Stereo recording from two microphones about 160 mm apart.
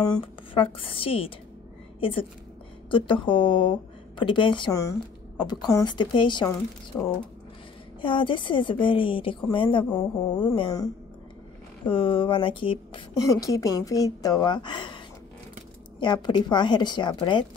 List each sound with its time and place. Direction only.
0.1 s a woman's voice: 35° left (ahead or behind)
6.9 s speech: 15° left (ahead or behind)
8.0 s a woman's voice: 30° left (ahead or behind)
13.3 s a woman's voice: 20° left (ahead or behind)
16.0 s a woman's voice: 30° left (ahead or behind)